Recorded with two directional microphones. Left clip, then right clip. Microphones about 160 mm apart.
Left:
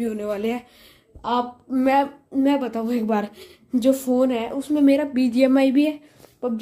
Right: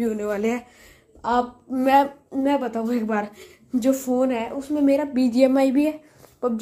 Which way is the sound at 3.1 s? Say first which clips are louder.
Left 2 dB; 40° left (ahead or behind).